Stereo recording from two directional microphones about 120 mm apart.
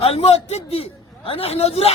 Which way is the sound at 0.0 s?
55° left (ahead or behind).